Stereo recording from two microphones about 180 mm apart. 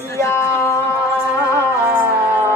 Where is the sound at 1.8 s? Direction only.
10° right (ahead or behind).